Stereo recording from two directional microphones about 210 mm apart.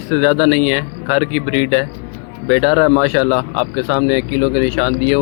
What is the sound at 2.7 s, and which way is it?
Speech, 40° left (ahead or behind).